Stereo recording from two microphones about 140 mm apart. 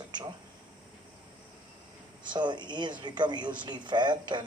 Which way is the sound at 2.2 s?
35° right (ahead or behind).